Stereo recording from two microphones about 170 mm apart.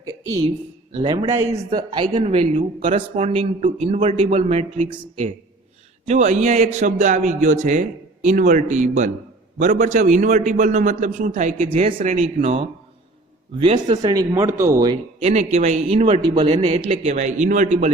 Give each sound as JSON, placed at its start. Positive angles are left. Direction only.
{"t": 0.9, "sound": "a man's voice", "side_deg": -25}
{"t": 14.0, "sound": "speech", "side_deg": -20}
{"t": 15.2, "sound": "speech", "side_deg": -40}